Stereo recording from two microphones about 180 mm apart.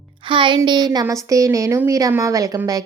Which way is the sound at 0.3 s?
25° right (ahead or behind).